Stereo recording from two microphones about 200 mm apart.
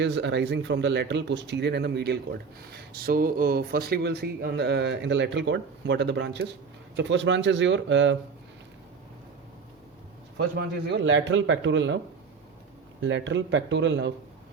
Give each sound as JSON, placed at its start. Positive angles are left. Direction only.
{"t": 0.0, "sound": "speech", "side_deg": -65}
{"t": 10.3, "sound": "speech", "side_deg": -60}
{"t": 13.0, "sound": "speech", "side_deg": -65}